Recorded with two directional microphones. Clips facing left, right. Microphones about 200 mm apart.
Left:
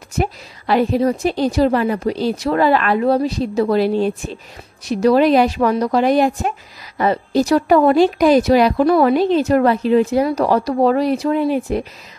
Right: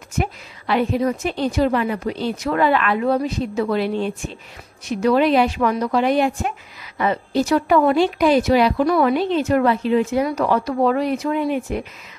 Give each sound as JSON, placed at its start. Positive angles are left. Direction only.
{"t": 0.2, "sound": "a woman's voice", "side_deg": 35}